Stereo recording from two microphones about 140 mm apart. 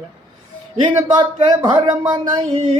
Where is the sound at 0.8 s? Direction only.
35° right (ahead or behind).